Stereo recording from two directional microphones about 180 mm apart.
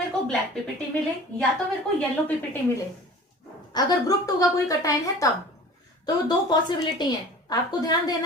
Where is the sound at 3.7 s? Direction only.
20° left (ahead or behind).